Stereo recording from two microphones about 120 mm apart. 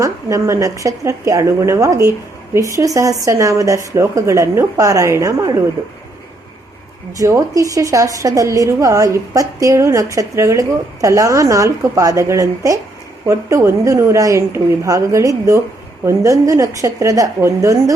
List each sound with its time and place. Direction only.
0.0 s a woman's voice: 25° right (ahead or behind)
7.2 s a woman's voice: 30° right (ahead or behind)